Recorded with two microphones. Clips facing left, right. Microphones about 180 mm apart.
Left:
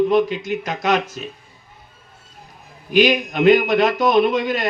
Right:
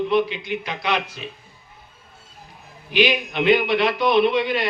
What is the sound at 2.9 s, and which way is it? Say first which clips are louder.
A man's voice: left 4 dB; 45° left (ahead or behind).